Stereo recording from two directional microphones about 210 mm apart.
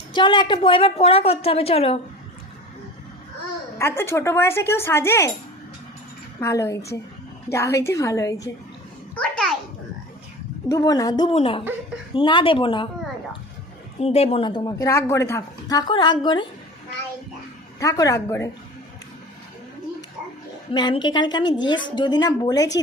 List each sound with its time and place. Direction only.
0.1 s a woman's voice: 20° left (ahead or behind)
3.8 s speech: 10° left (ahead or behind)
6.4 s speech: 15° left (ahead or behind)
9.1 s a sound: 5° left (ahead or behind)
10.7 s a woman's voice: 15° left (ahead or behind)
14.0 s a woman's voice: 30° left (ahead or behind)
17.7 s speech: 15° left (ahead or behind)
20.7 s a woman's voice: 20° left (ahead or behind)